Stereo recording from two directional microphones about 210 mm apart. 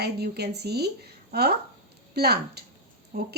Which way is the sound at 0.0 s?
50° right (ahead or behind).